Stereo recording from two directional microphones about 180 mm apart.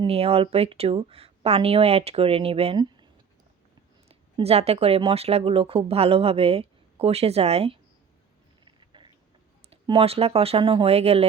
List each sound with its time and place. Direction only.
0.0 s speech: 35° right (ahead or behind)
4.1 s speech: 35° right (ahead or behind)
8.6 s a sound: 25° right (ahead or behind)
9.6 s speech: 30° right (ahead or behind)